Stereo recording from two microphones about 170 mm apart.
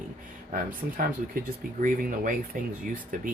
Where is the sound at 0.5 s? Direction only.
55° right (ahead or behind).